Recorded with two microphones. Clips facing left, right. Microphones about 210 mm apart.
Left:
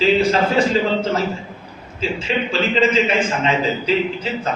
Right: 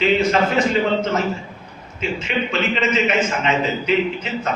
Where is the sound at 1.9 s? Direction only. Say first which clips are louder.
Left 1 dB; 30° left (ahead or behind).